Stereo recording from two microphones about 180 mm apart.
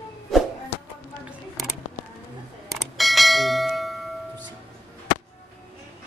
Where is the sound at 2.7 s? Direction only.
Centre (ahead or behind).